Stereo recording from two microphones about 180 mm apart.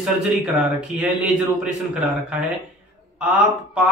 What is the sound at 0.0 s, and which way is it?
A man's voice, 5° right (ahead or behind).